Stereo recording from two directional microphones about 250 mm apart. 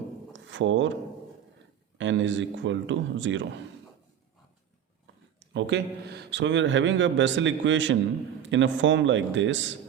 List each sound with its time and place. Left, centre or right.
0.5 s a man's voice: right
2.0 s a man's voice: right
5.5 s a man's voice: right